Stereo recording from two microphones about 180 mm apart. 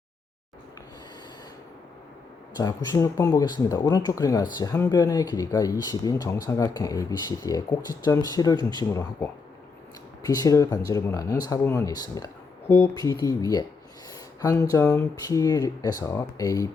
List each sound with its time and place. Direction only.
2.6 s speech: 20° left (ahead or behind)